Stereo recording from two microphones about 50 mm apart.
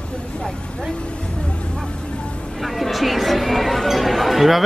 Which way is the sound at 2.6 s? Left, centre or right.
Centre.